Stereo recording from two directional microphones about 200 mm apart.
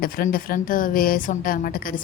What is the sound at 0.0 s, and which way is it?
A woman's voice, 45° left (ahead or behind).